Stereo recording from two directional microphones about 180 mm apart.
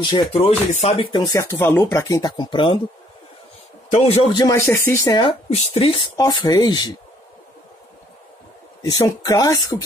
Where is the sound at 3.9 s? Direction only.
35° left (ahead or behind).